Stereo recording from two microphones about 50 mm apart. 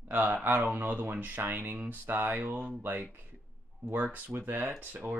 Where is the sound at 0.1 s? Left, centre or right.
Right.